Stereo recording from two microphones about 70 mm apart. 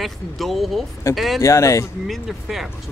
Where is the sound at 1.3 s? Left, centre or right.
Left.